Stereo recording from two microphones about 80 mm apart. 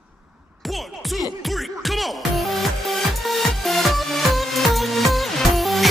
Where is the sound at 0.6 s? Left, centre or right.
Centre.